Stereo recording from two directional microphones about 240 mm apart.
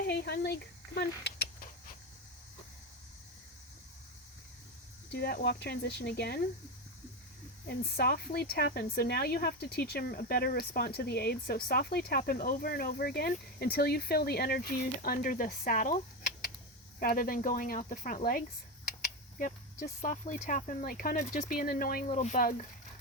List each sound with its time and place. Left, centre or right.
0.0 s a sound: left
5.1 s speech: left
7.7 s speech: left
17.0 s speech: left
19.8 s speech: left